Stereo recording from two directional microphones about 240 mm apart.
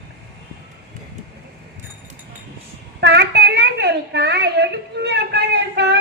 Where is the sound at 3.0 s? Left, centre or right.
Right.